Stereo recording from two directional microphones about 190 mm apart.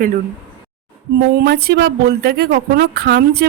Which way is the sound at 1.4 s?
55° right (ahead or behind).